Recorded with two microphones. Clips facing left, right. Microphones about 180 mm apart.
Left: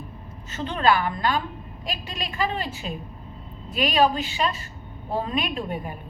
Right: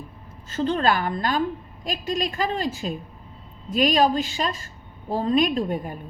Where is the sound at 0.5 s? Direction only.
45° right (ahead or behind).